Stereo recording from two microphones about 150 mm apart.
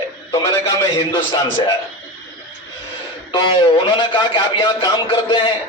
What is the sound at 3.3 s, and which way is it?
A man's voice, 35° left (ahead or behind).